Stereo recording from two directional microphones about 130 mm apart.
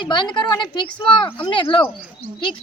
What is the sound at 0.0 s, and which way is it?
Speech, 35° left (ahead or behind).